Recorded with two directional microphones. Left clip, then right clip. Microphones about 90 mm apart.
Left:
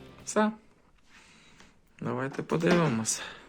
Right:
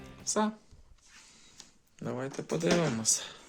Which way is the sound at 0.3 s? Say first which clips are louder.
Left 3 dB; 30° right (ahead or behind).